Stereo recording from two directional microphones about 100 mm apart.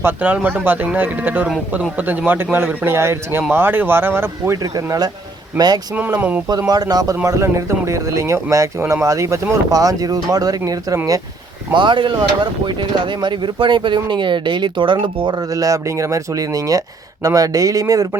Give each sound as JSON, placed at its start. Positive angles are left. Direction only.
{"t": 0.0, "sound": "speech", "side_deg": -15}
{"t": 4.5, "sound": "speech", "side_deg": -35}
{"t": 5.9, "sound": "speech", "side_deg": -15}
{"t": 6.7, "sound": "speech", "side_deg": -40}
{"t": 11.7, "sound": "speech", "side_deg": -50}
{"t": 15.4, "sound": "speech", "side_deg": -35}